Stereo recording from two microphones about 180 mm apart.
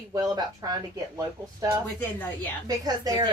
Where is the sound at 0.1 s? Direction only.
20° right (ahead or behind).